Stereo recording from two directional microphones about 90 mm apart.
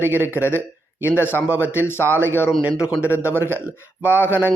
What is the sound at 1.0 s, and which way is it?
A man's voice, 25° left (ahead or behind).